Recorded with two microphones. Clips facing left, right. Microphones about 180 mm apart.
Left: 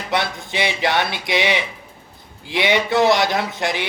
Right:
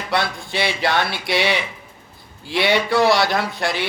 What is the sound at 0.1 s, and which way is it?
A man's voice, 20° left (ahead or behind).